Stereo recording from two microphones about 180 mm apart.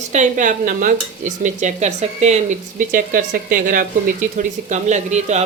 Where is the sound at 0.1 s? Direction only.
45° right (ahead or behind).